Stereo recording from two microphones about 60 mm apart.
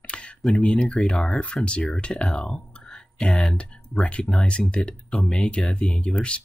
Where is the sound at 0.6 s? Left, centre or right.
Centre.